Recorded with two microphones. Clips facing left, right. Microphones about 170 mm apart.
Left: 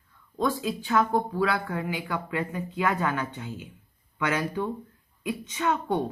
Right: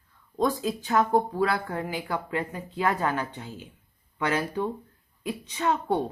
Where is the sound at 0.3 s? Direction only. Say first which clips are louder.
Right 1 dB; 40° right (ahead or behind).